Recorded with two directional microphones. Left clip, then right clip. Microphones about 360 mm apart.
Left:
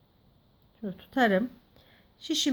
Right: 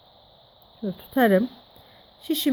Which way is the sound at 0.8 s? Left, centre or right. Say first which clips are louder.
Right 4 dB; right.